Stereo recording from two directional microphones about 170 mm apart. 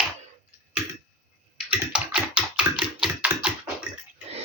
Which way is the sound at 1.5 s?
5° right (ahead or behind).